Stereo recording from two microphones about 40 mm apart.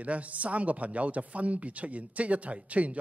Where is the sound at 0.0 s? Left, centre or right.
Right.